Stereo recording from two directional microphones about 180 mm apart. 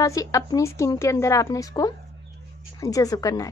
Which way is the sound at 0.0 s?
20° left (ahead or behind).